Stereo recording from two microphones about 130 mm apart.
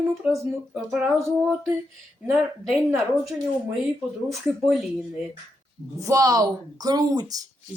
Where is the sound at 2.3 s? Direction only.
Centre (ahead or behind).